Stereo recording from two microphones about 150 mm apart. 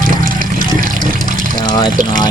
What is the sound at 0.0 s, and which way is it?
Water, 65° right (ahead or behind).